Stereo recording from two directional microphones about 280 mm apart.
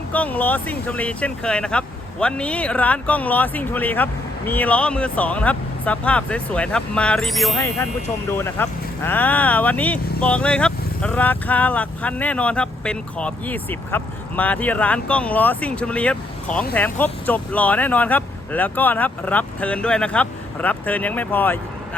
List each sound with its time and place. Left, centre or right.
0.1 s speech: centre